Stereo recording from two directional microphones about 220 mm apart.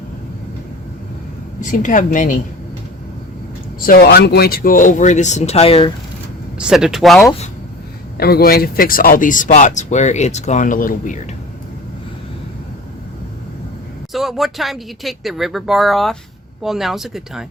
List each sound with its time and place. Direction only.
1.6 s speech: 35° left (ahead or behind)
3.8 s speech: 40° left (ahead or behind); by 5.9 s 25° left (ahead or behind)
6.6 s speech: 5° right (ahead or behind)
8.2 s speech: 45° left (ahead or behind)
14.1 s speech: centre (ahead or behind)